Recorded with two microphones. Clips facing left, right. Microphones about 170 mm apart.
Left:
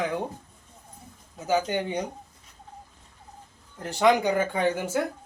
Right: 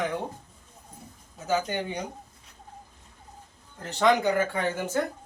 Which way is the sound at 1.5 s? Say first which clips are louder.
Left 2 dB; 15° left (ahead or behind).